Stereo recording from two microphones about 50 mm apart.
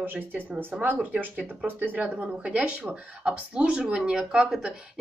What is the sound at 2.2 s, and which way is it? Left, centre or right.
Speech, right.